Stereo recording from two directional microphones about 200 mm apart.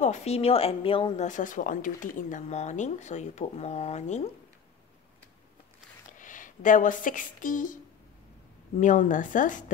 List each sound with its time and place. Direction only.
0.0 s speech: 35° left (ahead or behind)
6.1 s speech: 40° left (ahead or behind)